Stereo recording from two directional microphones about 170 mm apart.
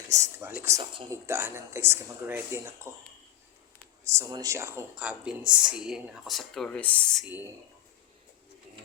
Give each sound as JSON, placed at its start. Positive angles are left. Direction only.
{"t": 0.1, "sound": "a sound", "side_deg": -15}
{"t": 1.1, "sound": "speech", "side_deg": -15}
{"t": 4.0, "sound": "speech", "side_deg": -15}